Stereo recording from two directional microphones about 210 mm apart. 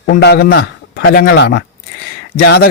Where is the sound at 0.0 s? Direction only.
50° left (ahead or behind).